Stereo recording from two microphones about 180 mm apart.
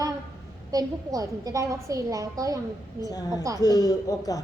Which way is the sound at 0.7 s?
20° right (ahead or behind).